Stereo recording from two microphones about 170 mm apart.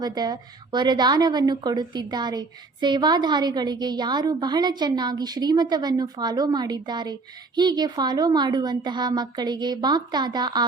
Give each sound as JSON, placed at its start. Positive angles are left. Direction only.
{"t": 0.0, "sound": "a woman's voice", "side_deg": -25}